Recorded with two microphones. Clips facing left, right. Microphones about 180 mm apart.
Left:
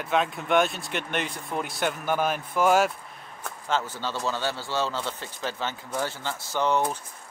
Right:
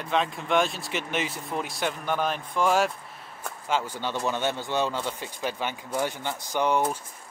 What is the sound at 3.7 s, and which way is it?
A man's voice, 10° right (ahead or behind).